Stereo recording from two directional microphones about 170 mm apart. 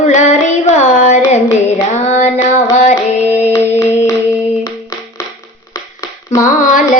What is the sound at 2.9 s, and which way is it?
Music, 40° left (ahead or behind).